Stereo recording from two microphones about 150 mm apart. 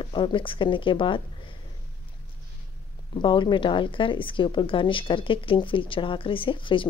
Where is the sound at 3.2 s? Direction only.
35° left (ahead or behind).